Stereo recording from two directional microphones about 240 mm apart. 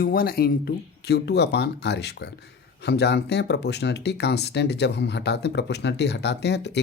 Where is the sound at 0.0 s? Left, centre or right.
Left.